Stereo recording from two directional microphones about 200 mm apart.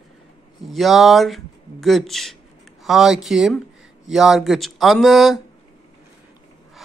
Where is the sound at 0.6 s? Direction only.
Centre (ahead or behind).